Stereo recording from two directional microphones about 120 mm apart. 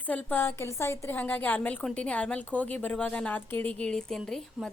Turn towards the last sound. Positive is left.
turn(degrees=5)  # may be behind; listen again after turning